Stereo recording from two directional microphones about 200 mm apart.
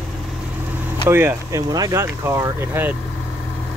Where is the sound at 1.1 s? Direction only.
10° right (ahead or behind).